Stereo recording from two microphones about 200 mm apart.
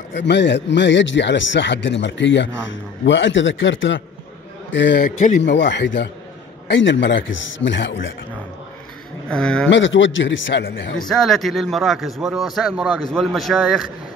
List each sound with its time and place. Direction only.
0.1 s a man's voice: 60° left (ahead or behind)
9.3 s speech: 5° left (ahead or behind)
9.7 s a man's voice: 70° left (ahead or behind)
11.0 s speech: centre (ahead or behind)